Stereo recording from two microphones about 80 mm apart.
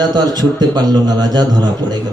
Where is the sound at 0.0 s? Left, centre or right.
Right.